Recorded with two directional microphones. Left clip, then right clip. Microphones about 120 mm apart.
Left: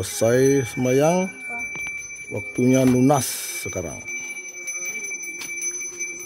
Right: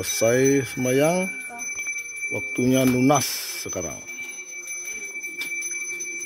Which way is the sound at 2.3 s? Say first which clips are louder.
Left 2 dB; 30° left (ahead or behind).